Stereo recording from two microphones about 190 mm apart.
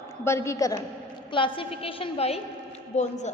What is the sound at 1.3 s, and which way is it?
A woman's voice, 25° left (ahead or behind).